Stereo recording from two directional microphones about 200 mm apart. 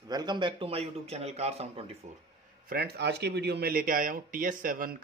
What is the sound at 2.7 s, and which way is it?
Speech, 55° right (ahead or behind).